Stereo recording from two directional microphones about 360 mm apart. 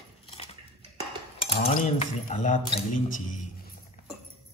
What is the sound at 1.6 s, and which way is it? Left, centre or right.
Speech, centre.